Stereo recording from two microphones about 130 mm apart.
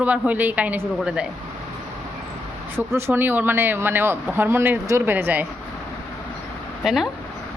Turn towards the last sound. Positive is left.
turn(degrees=0)  # may be behind; listen again after turning